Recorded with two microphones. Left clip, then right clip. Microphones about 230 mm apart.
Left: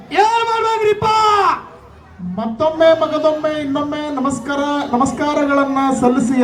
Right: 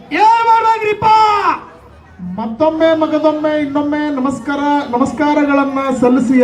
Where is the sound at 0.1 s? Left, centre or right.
Left.